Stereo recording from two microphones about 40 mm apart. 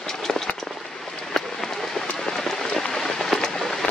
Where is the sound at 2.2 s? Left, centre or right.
Centre.